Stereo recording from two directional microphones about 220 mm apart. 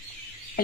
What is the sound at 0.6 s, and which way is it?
Frog, 40° left (ahead or behind).